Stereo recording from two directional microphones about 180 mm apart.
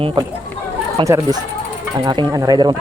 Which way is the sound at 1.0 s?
15° right (ahead or behind).